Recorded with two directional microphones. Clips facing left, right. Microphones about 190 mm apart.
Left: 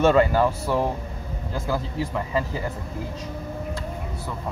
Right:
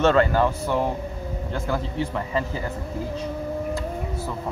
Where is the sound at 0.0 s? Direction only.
10° left (ahead or behind).